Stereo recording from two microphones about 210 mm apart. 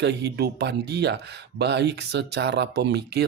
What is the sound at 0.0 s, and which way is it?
Speech, 55° right (ahead or behind).